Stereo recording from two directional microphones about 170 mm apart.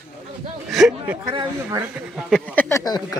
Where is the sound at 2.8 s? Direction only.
20° left (ahead or behind).